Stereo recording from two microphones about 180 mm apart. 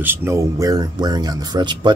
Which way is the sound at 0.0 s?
10° right (ahead or behind).